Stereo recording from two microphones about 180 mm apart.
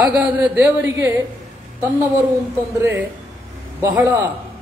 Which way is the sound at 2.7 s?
15° right (ahead or behind).